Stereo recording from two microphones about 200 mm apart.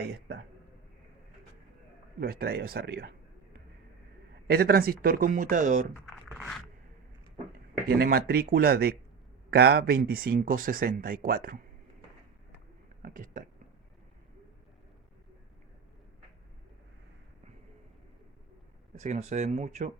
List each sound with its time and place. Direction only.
2.1 s speech: 50° right (ahead or behind)
4.5 s speech: 50° right (ahead or behind)
6.1 s a sound: centre (ahead or behind)
7.9 s speech: 50° right (ahead or behind)
13.0 s a sound: 40° right (ahead or behind)
18.9 s speech: 35° right (ahead or behind)